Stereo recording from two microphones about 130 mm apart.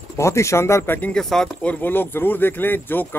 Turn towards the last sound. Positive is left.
turn(degrees=15)  # may be behind; listen again after turning